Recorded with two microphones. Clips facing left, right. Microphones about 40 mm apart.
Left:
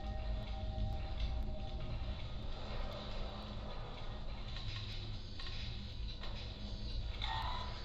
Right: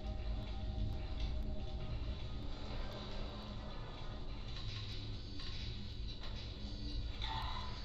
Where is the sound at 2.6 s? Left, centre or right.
Left.